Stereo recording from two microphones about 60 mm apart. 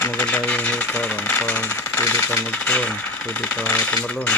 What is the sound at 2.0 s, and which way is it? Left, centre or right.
Speech, left.